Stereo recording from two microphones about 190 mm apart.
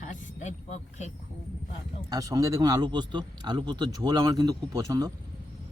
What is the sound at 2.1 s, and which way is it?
Speech, 20° right (ahead or behind).